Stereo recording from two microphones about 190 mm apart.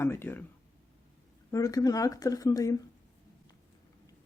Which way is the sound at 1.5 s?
15° left (ahead or behind).